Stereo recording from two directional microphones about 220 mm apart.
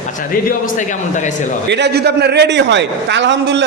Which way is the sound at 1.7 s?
50° right (ahead or behind).